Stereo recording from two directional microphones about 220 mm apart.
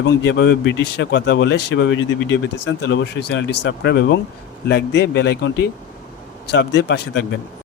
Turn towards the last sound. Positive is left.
turn(degrees=50)  # may be behind; listen again after turning